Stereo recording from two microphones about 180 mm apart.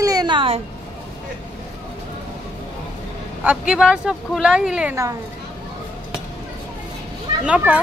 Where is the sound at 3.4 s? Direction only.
5° right (ahead or behind).